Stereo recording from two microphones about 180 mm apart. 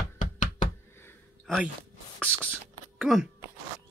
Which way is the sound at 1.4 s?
Centre (ahead or behind).